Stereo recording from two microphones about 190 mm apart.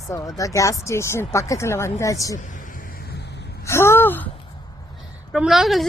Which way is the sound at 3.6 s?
15° left (ahead or behind).